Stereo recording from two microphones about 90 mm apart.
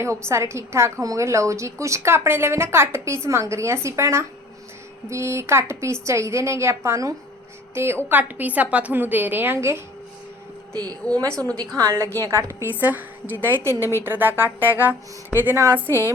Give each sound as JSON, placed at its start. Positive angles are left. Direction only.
{"t": 0.0, "sound": "a woman's voice", "side_deg": -30}
{"t": 11.3, "sound": "a woman's voice", "side_deg": 10}
{"t": 11.8, "sound": "a woman's voice", "side_deg": -30}
{"t": 12.8, "sound": "a woman's voice", "side_deg": -20}